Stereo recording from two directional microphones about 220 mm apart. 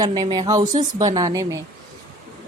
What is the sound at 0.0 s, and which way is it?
Speech, 20° right (ahead or behind).